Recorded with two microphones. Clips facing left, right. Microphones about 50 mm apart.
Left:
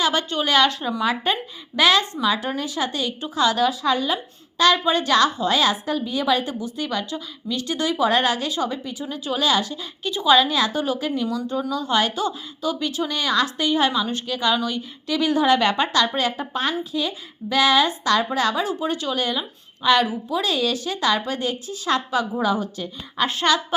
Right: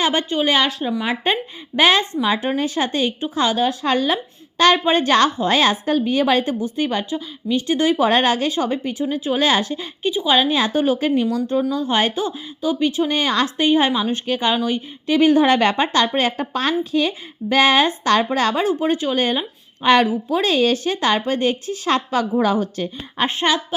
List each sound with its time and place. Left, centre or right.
0.0 s speech: right
3.7 s a woman's voice: right
10.1 s a woman's voice: centre
10.3 s speech: right
11.7 s speech: right
13.1 s speech: right
16.5 s a woman's voice: right
18.7 s speech: right
19.2 s a woman's voice: right
23.1 s speech: right